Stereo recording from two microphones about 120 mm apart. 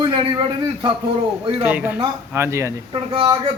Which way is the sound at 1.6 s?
15° right (ahead or behind).